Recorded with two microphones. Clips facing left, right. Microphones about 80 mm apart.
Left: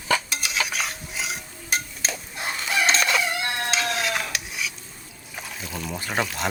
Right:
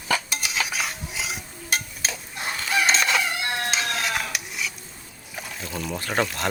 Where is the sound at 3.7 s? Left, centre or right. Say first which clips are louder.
Left 1 dB; centre.